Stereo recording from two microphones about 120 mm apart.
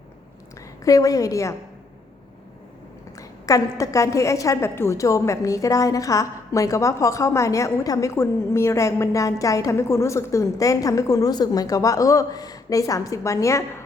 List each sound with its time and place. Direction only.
0.9 s a woman's voice: 30° left (ahead or behind)
3.2 s a woman's voice: 30° left (ahead or behind)